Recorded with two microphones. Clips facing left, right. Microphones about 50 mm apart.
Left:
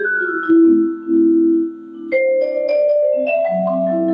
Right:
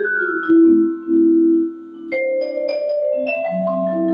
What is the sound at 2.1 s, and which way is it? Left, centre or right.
Music, centre.